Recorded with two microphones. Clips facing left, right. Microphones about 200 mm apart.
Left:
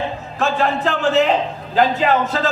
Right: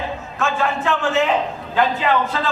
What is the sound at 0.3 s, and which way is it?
A man's voice, 35° left (ahead or behind).